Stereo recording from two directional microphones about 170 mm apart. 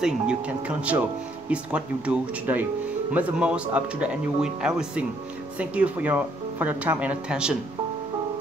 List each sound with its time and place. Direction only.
0.0 s speech: 5° right (ahead or behind)